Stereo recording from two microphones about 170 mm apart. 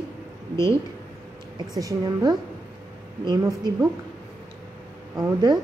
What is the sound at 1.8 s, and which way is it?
A woman's voice, 20° right (ahead or behind).